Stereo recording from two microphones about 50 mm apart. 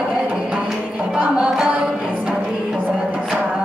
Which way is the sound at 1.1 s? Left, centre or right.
Centre.